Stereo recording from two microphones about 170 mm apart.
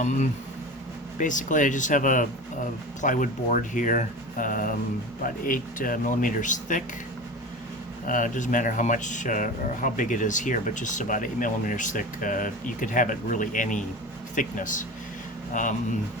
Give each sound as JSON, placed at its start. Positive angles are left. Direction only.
{"t": 0.0, "sound": "speech", "side_deg": 45}
{"t": 8.0, "sound": "speech", "side_deg": 50}